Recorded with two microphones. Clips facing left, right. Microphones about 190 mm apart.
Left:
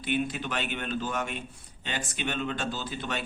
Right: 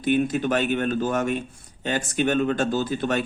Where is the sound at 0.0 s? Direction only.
45° right (ahead or behind).